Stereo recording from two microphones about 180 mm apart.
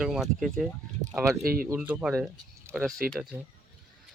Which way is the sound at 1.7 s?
10° right (ahead or behind).